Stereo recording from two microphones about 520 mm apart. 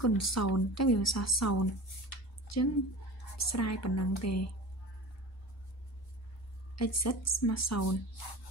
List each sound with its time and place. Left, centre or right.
0.0 s speech: left
2.0 s a sound: left
3.3 s speech: left
6.7 s speech: left